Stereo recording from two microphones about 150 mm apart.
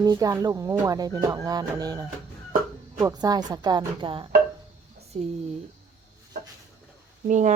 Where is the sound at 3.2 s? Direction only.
25° right (ahead or behind).